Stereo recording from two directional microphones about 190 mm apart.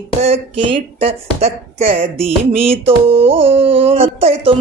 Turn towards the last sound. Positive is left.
turn(degrees=-30)  # may be behind; listen again after turning